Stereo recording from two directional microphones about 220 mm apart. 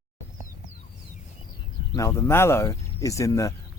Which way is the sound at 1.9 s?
15° left (ahead or behind).